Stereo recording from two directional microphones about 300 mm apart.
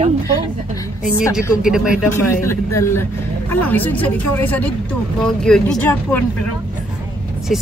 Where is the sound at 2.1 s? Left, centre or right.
Centre.